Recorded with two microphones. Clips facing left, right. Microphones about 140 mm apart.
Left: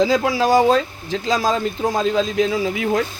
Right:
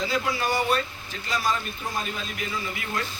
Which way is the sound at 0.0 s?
90° left.